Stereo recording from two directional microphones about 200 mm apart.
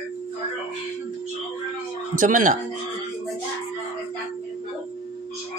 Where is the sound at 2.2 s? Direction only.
40° right (ahead or behind).